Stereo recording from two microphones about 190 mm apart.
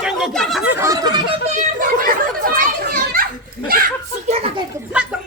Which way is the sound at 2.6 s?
50° right (ahead or behind).